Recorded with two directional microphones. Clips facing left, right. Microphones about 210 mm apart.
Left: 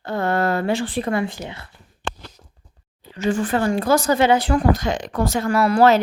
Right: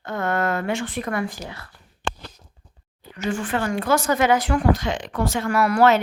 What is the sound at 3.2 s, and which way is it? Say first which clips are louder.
A woman's voice: left 4 dB; 35° left (ahead or behind).